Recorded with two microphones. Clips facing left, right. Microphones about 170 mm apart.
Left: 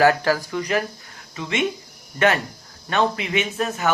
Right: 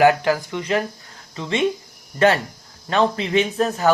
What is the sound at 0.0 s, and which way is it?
Speech, 20° right (ahead or behind).